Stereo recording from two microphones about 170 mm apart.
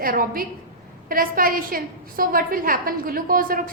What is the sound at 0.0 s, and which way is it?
A woman's voice, 60° right (ahead or behind).